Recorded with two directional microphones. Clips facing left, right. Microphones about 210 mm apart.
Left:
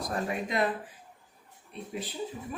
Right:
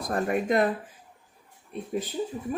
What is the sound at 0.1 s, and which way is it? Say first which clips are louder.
Speech: right 8 dB; 50° right (ahead or behind).